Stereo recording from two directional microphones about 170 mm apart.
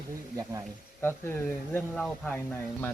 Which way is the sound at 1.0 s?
15° left (ahead or behind).